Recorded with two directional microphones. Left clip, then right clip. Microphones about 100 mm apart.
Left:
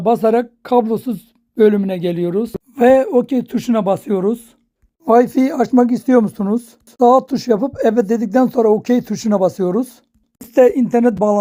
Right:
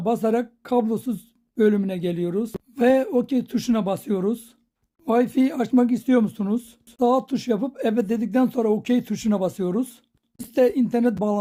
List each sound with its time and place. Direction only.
0.0 s speech: 25° left (ahead or behind)
1.9 s speech: 30° left (ahead or behind)
5.0 s speech: 55° left (ahead or behind); by 11.1 s 40° left (ahead or behind)